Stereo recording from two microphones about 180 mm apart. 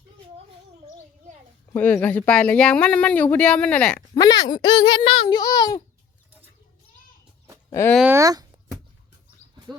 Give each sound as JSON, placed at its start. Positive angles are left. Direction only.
{"t": 1.7, "sound": "speech", "side_deg": 10}
{"t": 4.1, "sound": "a child's voice", "side_deg": 20}
{"t": 7.7, "sound": "speech", "side_deg": 15}
{"t": 8.1, "sound": "speech", "side_deg": -20}